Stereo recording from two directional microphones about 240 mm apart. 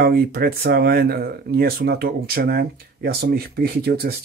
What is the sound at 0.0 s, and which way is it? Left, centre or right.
Speech, right.